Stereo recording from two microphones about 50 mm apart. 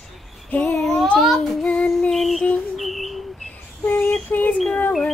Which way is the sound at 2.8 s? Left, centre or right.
Centre.